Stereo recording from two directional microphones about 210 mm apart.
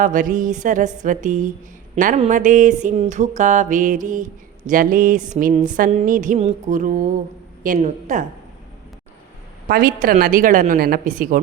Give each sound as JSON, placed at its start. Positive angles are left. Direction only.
{"t": 0.0, "sound": "mantra", "side_deg": -40}
{"t": 9.6, "sound": "a woman's voice", "side_deg": -45}